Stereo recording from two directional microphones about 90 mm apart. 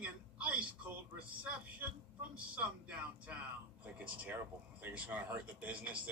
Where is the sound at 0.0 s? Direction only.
15° right (ahead or behind).